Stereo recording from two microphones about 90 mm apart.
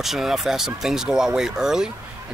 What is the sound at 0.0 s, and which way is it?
Speech, 5° right (ahead or behind).